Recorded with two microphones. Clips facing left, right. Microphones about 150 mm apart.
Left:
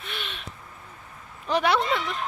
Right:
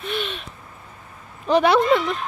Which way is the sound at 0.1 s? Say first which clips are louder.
Right 10 dB; 25° right (ahead or behind).